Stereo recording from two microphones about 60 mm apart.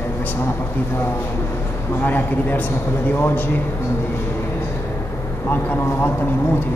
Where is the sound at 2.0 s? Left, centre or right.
Left.